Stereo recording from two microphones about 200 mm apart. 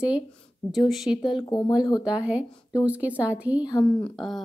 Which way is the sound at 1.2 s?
20° left (ahead or behind).